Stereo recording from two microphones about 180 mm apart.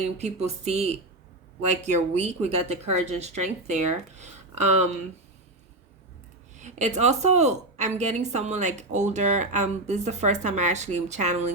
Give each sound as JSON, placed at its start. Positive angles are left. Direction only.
{"t": 0.2, "sound": "speech", "side_deg": -35}
{"t": 6.6, "sound": "a woman's voice", "side_deg": -40}